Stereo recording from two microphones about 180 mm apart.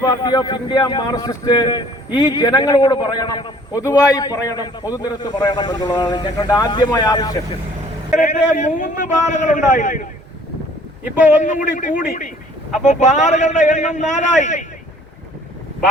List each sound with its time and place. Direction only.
0.0 s speech: 25° left (ahead or behind)
8.1 s a man's voice: 45° left (ahead or behind)
11.4 s a man's voice: 45° left (ahead or behind)